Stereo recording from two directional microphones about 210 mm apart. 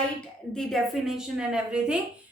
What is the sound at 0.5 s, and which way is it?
A woman's voice, centre (ahead or behind).